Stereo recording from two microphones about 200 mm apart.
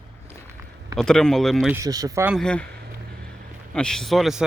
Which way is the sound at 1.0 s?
5° left (ahead or behind).